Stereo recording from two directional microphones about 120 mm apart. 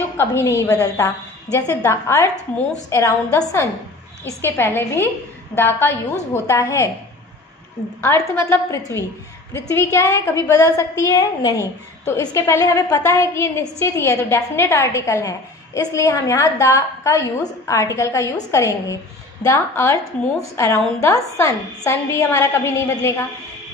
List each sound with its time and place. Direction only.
0.2 s a woman's voice: 25° left (ahead or behind)
8.0 s a woman's voice: 20° left (ahead or behind)